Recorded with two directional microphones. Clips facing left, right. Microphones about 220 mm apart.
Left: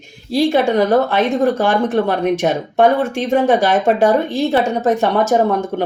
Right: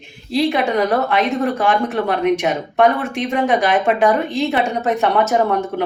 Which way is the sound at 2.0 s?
35° left (ahead or behind).